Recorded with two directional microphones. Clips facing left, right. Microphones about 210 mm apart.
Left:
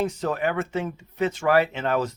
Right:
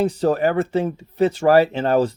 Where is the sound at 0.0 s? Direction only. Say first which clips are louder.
Right 7 dB; 35° right (ahead or behind).